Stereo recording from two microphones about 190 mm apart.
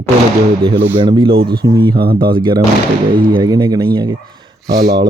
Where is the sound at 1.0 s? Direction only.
25° right (ahead or behind).